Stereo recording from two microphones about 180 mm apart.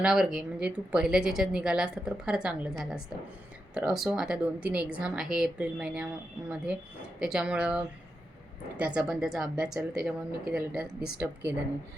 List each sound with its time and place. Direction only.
0.0 s a woman's voice: 5° right (ahead or behind)